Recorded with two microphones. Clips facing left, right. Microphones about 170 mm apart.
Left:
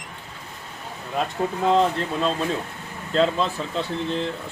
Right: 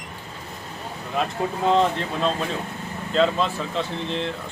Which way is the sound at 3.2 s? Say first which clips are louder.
Even; centre (ahead or behind).